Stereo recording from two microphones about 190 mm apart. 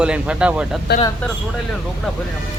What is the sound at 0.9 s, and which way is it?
Speech, 60° left (ahead or behind).